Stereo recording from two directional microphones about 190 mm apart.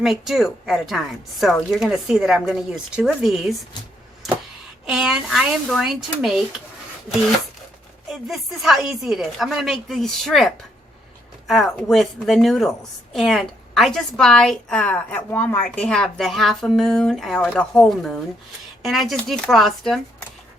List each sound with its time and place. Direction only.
0.0 s a woman's voice: centre (ahead or behind)
4.9 s a woman's voice: 5° right (ahead or behind)
8.1 s a woman's voice: centre (ahead or behind)